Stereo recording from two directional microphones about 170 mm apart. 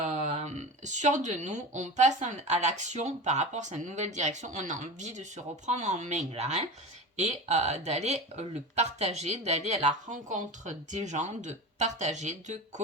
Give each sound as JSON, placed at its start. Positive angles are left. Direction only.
{"t": 0.0, "sound": "speech", "side_deg": -40}